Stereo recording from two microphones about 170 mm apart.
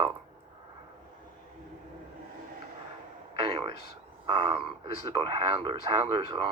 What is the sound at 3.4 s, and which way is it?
Speech, 25° right (ahead or behind).